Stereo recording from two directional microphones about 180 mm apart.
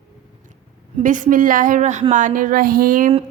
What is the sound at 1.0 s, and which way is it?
A woman's voice, 45° right (ahead or behind).